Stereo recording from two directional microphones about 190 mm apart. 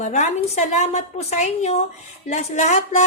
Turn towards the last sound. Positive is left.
turn(degrees=35)  # may be behind; listen again after turning